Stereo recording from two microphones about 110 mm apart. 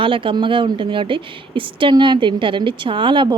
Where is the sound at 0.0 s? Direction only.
50° right (ahead or behind).